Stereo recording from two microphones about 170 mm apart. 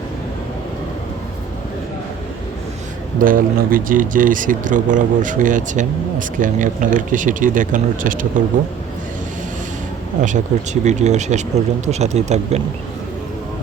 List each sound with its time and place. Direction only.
3.2 s speech: 55° right (ahead or behind)
10.2 s speech: 45° right (ahead or behind)